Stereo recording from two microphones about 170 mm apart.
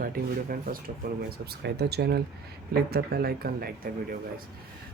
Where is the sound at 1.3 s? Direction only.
70° right (ahead or behind).